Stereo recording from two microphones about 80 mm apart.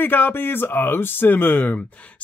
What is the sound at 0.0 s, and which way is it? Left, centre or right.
Speech, left.